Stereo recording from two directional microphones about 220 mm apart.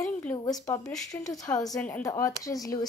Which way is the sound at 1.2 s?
15° left (ahead or behind).